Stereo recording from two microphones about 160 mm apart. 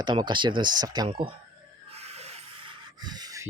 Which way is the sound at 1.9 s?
40° right (ahead or behind).